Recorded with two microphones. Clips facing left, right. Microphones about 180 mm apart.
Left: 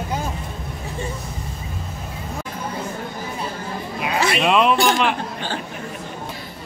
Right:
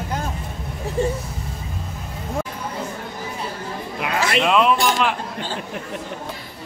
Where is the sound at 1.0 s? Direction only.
40° right (ahead or behind).